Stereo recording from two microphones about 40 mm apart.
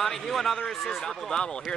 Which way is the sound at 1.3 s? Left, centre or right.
Centre.